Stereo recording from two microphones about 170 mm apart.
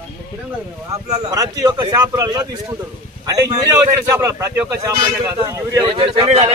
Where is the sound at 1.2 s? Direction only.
20° right (ahead or behind).